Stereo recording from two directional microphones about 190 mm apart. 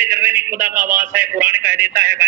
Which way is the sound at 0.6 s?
45° right (ahead or behind).